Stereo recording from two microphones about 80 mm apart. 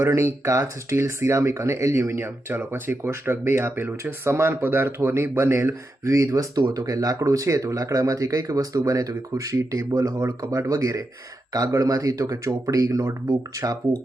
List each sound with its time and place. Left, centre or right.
0.0 s speech: right
6.6 s speech: right